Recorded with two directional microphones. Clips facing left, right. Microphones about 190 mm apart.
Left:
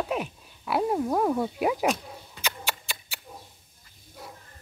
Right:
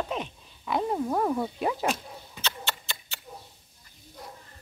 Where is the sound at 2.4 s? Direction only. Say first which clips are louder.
Left 1 dB; 10° left (ahead or behind).